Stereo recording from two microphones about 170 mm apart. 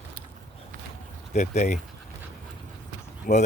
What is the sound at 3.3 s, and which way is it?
Speech, 60° left (ahead or behind).